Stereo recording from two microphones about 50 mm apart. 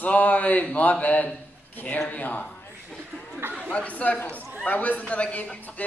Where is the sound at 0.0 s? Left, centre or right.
Left.